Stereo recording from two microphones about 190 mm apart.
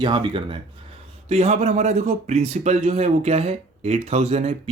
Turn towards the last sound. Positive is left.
turn(degrees=-35)  # may be behind; listen again after turning